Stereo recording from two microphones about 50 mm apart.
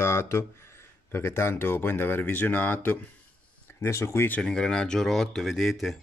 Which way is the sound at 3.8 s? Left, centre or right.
Left.